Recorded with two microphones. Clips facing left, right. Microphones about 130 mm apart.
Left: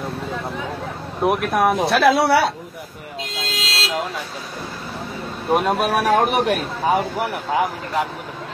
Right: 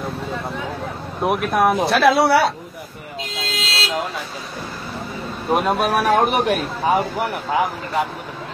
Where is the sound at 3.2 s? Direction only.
Centre (ahead or behind).